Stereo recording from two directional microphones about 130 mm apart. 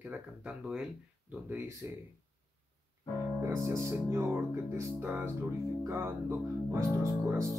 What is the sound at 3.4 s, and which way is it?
Speech, 20° right (ahead or behind).